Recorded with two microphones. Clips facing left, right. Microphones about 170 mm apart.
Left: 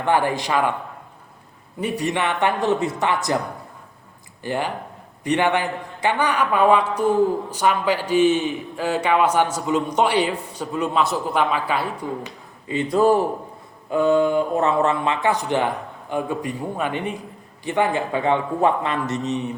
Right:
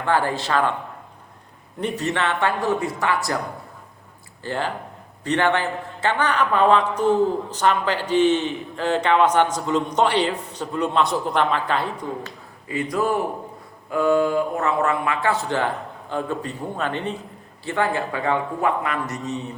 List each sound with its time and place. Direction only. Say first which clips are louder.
0.0 s a man's voice: left 2 dB; 15° left (ahead or behind)
1.8 s a man's voice: left 1 dB; 10° left (ahead or behind)
4.4 s a man's voice: left 1 dB; 15° left (ahead or behind)
12.6 s a man's voice: left 5 dB; 25° left (ahead or behind)